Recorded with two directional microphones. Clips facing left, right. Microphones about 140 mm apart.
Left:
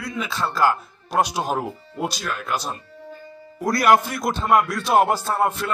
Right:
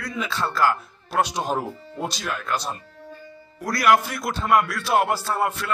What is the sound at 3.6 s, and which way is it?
A man's voice, 30° left (ahead or behind).